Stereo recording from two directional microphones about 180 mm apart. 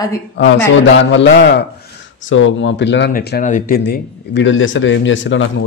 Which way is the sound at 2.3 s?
90° left.